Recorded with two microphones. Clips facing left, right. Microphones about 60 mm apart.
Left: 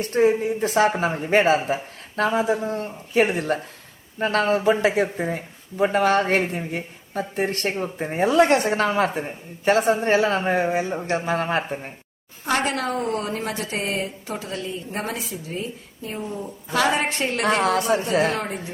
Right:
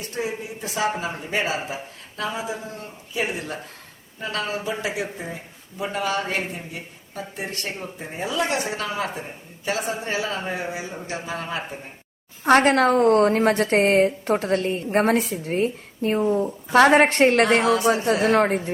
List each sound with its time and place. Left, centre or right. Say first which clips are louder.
0.0 s speech: left 10 dB; left
12.5 s a woman's voice: right 7 dB; right
16.2 s a woman's voice: right 9 dB; right